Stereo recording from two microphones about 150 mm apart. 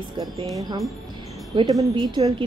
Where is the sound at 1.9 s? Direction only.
35° right (ahead or behind).